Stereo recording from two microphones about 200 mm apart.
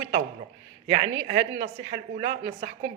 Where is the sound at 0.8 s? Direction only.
65° right (ahead or behind).